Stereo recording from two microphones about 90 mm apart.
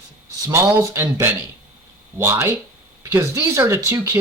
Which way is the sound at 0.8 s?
30° right (ahead or behind).